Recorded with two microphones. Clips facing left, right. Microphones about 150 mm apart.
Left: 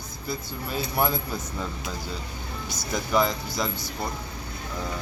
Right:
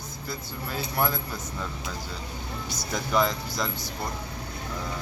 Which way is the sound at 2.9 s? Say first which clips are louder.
Left 1 dB; 5° left (ahead or behind).